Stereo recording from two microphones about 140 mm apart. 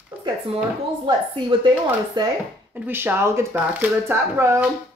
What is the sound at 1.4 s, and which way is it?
Speech, 30° right (ahead or behind).